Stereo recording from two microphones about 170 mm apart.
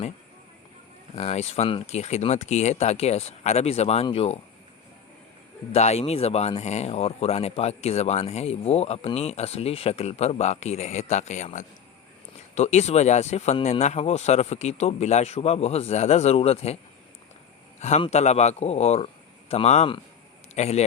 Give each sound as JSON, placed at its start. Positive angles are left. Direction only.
{"t": 1.1, "sound": "speech", "side_deg": 40}
{"t": 5.7, "sound": "speech", "side_deg": 40}
{"t": 17.7, "sound": "a man's voice", "side_deg": 45}